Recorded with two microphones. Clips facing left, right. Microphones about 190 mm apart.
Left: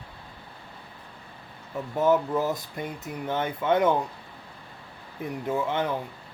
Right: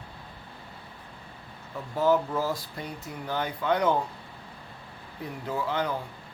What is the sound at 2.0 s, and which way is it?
Speech, 20° left (ahead or behind).